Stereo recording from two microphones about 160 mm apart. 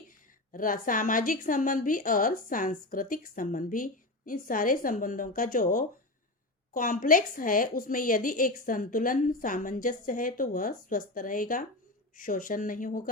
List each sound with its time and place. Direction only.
0.5 s a woman's voice: 60° left (ahead or behind)